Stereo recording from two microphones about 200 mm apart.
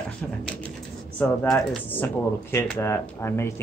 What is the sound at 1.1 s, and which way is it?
Speech, 5° left (ahead or behind).